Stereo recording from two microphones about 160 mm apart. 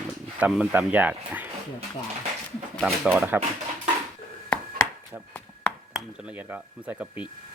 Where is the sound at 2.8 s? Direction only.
5° right (ahead or behind).